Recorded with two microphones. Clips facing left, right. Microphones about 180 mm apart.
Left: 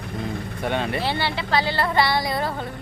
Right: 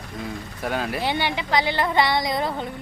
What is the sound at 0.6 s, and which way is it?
Speech, centre (ahead or behind).